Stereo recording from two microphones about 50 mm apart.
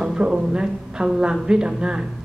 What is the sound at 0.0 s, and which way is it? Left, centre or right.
A woman's voice, centre.